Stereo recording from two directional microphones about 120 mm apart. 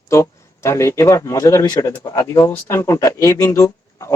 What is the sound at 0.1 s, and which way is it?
Speech, 25° left (ahead or behind).